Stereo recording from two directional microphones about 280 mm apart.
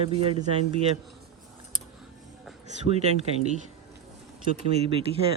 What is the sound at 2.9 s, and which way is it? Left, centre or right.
Speech, right.